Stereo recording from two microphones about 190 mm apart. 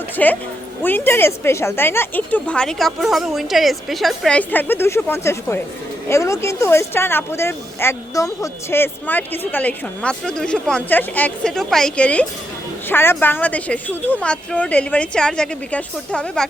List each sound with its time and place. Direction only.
0.2 s speech: 5° left (ahead or behind)